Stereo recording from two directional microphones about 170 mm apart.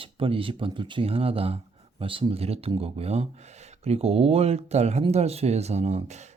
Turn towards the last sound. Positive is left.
turn(degrees=-40)  # may be behind; listen again after turning